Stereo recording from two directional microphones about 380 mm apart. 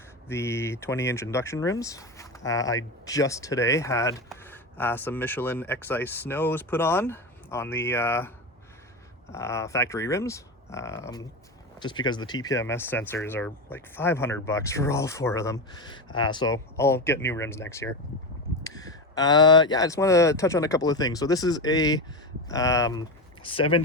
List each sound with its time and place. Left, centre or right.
0.3 s speech: centre
9.3 s speech: centre